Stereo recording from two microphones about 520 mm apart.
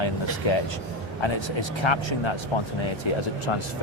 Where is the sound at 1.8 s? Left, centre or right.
Left.